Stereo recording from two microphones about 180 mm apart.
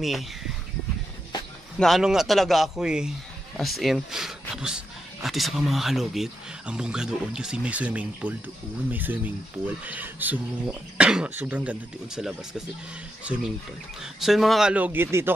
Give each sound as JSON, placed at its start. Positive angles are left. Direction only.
{"t": 1.8, "sound": "a man's voice", "side_deg": 0}